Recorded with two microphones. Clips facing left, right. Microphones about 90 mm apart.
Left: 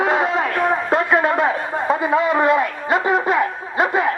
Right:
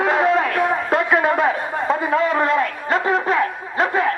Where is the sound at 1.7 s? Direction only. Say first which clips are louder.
Left 1 dB; 5° left (ahead or behind).